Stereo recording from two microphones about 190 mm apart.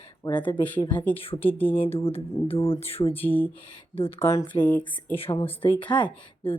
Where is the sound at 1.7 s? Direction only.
30° left (ahead or behind).